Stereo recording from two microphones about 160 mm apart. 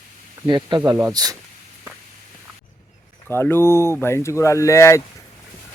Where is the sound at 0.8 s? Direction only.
15° right (ahead or behind).